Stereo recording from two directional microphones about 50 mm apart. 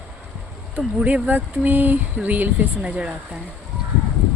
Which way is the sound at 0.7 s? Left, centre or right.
Right.